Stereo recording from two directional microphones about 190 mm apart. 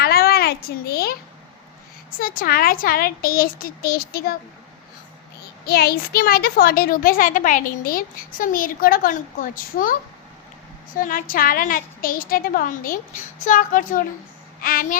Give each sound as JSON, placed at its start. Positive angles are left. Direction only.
{"t": 0.0, "sound": "a sound", "side_deg": 55}
{"t": 2.0, "sound": "a woman's voice", "side_deg": 50}
{"t": 5.6, "sound": "a woman's voice", "side_deg": 55}